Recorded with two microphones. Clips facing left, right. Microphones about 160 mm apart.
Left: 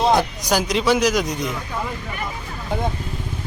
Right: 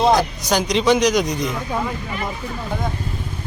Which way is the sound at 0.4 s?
5° left (ahead or behind).